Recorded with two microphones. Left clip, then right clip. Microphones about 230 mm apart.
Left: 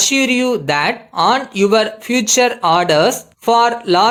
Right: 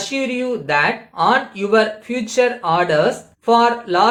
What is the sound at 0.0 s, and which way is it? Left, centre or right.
Speech, left.